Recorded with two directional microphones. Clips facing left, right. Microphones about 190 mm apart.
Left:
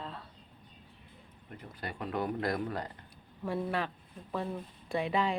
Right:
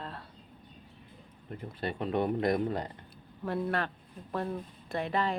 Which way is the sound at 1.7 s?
25° right (ahead or behind).